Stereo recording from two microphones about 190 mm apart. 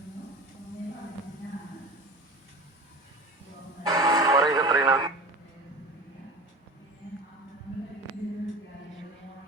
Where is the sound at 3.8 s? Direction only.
20° right (ahead or behind).